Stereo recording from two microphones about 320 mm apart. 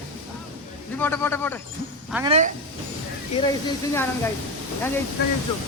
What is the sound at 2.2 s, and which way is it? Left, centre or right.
Speech, right.